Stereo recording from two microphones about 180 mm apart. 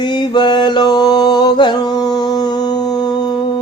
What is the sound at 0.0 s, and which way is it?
Mantra, 25° left (ahead or behind).